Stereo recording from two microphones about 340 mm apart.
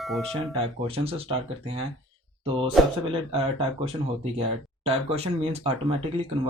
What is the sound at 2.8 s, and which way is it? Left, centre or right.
Speech, centre.